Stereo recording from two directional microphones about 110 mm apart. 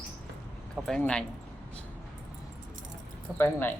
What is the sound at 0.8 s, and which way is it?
Speech, centre (ahead or behind).